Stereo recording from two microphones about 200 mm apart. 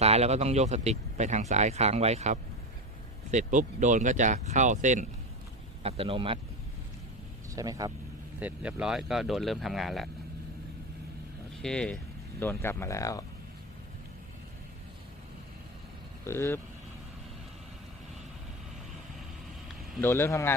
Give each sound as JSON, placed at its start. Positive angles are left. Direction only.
{"t": 0.0, "sound": "speech", "side_deg": -30}
{"t": 7.5, "sound": "speech", "side_deg": -15}
{"t": 8.4, "sound": "speech", "side_deg": -5}
{"t": 11.6, "sound": "speech", "side_deg": 5}
{"t": 16.2, "sound": "speech", "side_deg": 15}
{"t": 20.0, "sound": "speech", "side_deg": 10}